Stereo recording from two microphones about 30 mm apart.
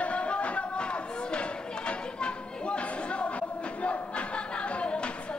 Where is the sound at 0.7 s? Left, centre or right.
Left.